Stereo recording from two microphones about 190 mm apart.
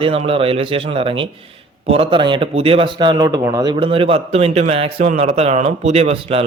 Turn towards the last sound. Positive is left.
turn(degrees=-30)  # may be behind; listen again after turning